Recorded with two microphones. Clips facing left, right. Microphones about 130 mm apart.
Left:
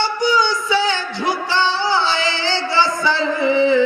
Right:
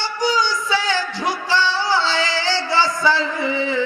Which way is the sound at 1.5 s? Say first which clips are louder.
Right 1 dB; 20° left (ahead or behind).